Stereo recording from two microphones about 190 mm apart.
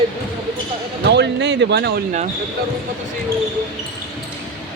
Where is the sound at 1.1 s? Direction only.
65° right (ahead or behind).